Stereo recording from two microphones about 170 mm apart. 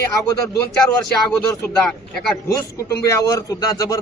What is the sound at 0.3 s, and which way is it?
Speech, 20° left (ahead or behind).